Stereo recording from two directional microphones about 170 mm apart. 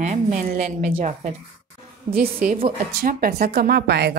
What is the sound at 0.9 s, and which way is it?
Speech, 40° right (ahead or behind).